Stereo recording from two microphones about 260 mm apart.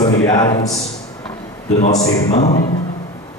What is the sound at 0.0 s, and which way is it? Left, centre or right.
Speech, left.